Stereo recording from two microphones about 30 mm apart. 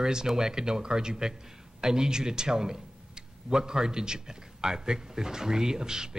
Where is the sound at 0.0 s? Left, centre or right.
Right.